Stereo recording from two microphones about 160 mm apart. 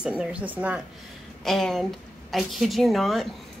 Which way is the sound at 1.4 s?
Centre (ahead or behind).